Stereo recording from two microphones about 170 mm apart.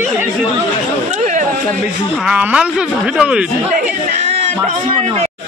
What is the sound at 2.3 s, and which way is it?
Speech, 5° right (ahead or behind).